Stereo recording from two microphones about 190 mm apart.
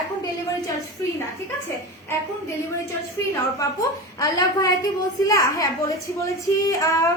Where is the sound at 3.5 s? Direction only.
20° left (ahead or behind).